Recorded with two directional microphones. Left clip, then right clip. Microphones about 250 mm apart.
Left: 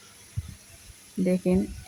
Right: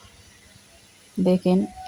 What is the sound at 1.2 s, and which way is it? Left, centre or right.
Speech, centre.